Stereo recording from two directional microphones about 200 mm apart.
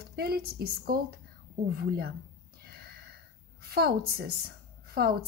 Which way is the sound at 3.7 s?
50° right (ahead or behind).